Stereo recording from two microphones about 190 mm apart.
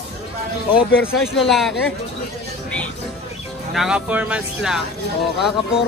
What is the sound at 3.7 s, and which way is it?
Speech, 5° right (ahead or behind).